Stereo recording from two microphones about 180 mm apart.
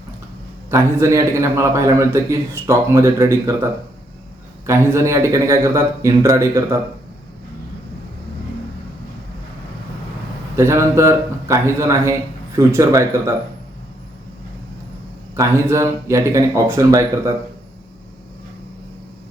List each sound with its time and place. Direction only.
0.7 s a man's voice: 15° right (ahead or behind)
10.5 s a man's voice: 15° right (ahead or behind)
15.4 s a man's voice: 15° right (ahead or behind)